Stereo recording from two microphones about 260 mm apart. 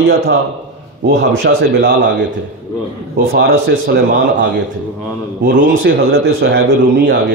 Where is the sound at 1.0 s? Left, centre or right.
Right.